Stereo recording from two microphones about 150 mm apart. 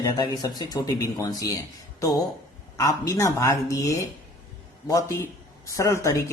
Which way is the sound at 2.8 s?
20° left (ahead or behind).